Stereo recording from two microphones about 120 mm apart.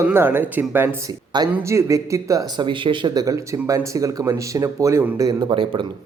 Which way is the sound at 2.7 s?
40° right (ahead or behind).